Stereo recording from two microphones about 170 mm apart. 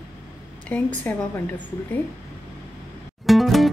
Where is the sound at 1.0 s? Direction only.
10° left (ahead or behind).